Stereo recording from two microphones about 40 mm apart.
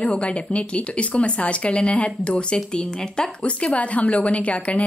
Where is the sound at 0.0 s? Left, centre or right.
Left.